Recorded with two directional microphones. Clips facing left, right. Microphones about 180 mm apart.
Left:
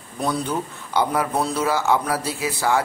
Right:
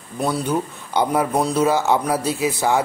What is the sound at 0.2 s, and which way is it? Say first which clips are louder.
A man's voice: right 3 dB; 10° right (ahead or behind).